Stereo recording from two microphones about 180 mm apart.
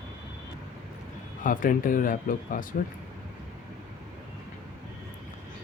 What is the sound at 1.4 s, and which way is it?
Speech, 50° left (ahead or behind).